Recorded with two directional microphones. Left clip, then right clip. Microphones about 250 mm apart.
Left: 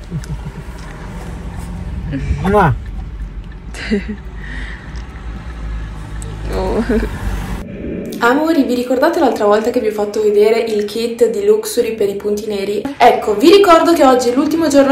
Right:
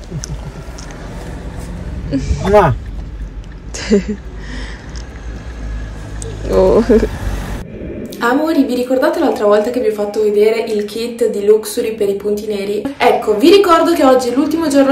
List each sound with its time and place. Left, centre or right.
2.1 s speech: right
2.4 s speech: centre
3.7 s a sound: right
8.2 s a woman's voice: centre